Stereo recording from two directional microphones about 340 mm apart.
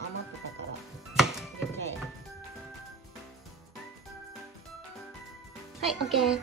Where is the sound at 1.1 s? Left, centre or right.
Centre.